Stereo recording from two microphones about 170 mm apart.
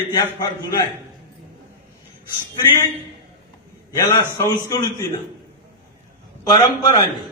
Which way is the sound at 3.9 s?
20° left (ahead or behind).